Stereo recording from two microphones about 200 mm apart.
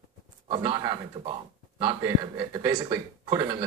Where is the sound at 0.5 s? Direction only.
25° right (ahead or behind).